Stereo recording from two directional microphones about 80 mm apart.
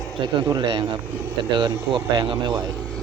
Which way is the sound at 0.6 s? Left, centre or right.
Right.